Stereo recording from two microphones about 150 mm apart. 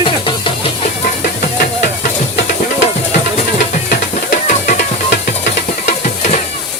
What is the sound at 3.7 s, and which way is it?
Music, 55° left (ahead or behind).